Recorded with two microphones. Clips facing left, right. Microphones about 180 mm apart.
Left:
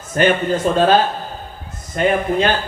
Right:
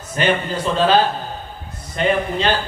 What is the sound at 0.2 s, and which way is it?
Speech, 50° left (ahead or behind).